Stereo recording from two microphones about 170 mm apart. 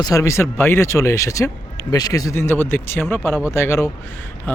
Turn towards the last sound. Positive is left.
turn(degrees=15)  # may be behind; listen again after turning